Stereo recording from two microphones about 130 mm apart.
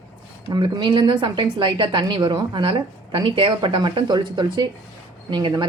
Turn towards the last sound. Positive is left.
turn(degrees=-35)  # may be behind; listen again after turning